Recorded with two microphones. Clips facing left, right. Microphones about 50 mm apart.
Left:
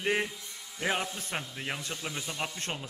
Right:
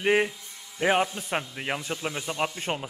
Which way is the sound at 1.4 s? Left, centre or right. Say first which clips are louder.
Right 6 dB; right.